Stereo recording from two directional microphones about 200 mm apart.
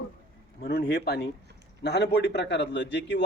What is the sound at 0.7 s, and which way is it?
A man's voice, 50° left (ahead or behind).